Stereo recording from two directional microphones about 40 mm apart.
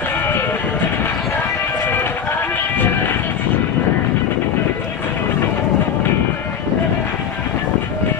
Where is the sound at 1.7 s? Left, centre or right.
Left.